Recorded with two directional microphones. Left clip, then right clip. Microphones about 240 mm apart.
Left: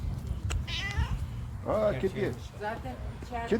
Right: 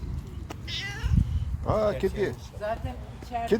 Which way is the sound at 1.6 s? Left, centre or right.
Right.